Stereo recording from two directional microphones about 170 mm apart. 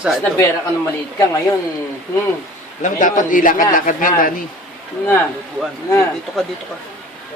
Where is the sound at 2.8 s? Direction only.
50° left (ahead or behind).